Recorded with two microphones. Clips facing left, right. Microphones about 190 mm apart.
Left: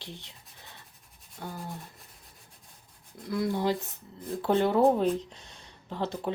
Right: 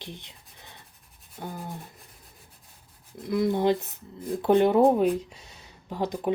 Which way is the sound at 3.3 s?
20° right (ahead or behind).